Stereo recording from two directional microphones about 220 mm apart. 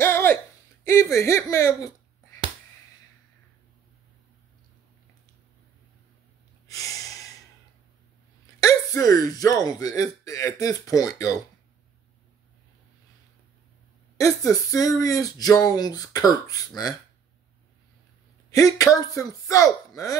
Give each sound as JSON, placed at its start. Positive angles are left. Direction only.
{"t": 0.0, "sound": "a sound", "side_deg": 10}
{"t": 0.8, "sound": "speech", "side_deg": 15}
{"t": 8.5, "sound": "speech", "side_deg": 15}
{"t": 14.1, "sound": "speech", "side_deg": 15}
{"t": 18.5, "sound": "speech", "side_deg": 15}